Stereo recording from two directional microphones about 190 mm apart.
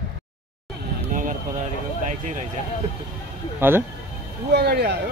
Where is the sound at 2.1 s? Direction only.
40° right (ahead or behind).